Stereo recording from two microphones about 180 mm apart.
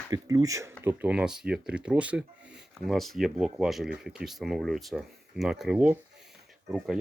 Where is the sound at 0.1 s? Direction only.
20° right (ahead or behind).